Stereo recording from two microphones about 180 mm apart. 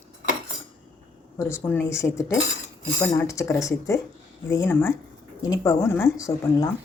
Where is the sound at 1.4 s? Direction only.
15° left (ahead or behind).